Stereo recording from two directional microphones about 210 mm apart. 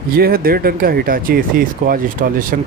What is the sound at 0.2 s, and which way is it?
Speech, 45° right (ahead or behind).